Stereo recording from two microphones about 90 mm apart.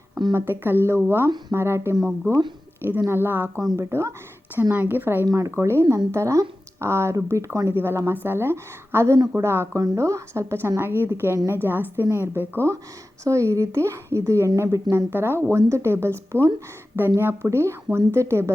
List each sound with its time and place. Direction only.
0.3 s speech: 25° right (ahead or behind)
4.7 s speech: 20° right (ahead or behind)
5.2 s speech: 35° right (ahead or behind)